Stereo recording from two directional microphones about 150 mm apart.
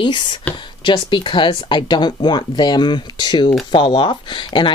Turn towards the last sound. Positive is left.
turn(degrees=30)  # may be behind; listen again after turning